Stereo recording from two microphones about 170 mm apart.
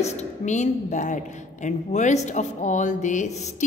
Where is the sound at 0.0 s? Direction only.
40° left (ahead or behind).